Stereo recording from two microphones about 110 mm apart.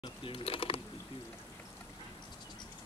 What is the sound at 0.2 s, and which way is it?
Speech, 55° left (ahead or behind).